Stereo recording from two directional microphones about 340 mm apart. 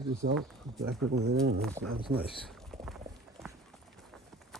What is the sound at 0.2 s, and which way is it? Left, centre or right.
Speech, right.